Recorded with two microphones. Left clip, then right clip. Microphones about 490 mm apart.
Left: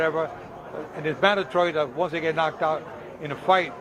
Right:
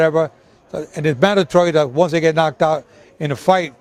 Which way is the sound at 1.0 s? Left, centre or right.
Right.